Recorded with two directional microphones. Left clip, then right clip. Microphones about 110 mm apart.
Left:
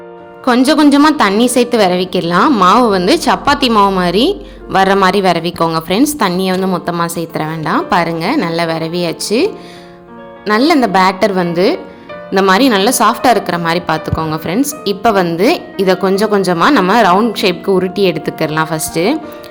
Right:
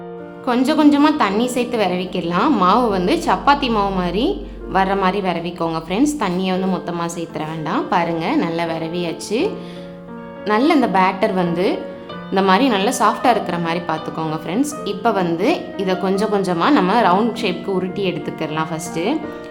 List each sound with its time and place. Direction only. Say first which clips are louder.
0.4 s a woman's voice: left 6 dB; 50° left (ahead or behind)
3.8 s speech: left 9 dB; 30° left (ahead or behind)
4.0 s a woman's voice: left 8 dB; 50° left (ahead or behind)
10.7 s a woman's voice: left 5 dB; 35° left (ahead or behind)